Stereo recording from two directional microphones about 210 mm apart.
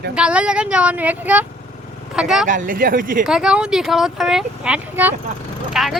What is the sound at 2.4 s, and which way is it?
Speech, 40° right (ahead or behind).